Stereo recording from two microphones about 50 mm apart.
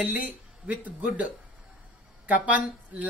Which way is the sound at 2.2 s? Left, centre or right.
Right.